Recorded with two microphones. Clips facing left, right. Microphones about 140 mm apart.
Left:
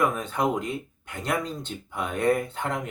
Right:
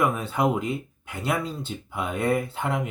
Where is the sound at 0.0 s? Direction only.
5° right (ahead or behind).